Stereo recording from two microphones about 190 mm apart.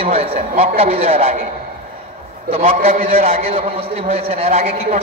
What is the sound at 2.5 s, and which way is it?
Speech, 30° right (ahead or behind).